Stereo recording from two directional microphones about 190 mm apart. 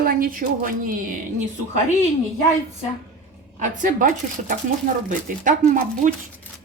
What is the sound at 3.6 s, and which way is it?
Speech, 45° right (ahead or behind).